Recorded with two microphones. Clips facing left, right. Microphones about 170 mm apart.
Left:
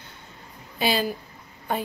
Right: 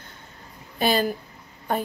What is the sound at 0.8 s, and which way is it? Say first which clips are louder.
Speech: right 2 dB; 50° right (ahead or behind).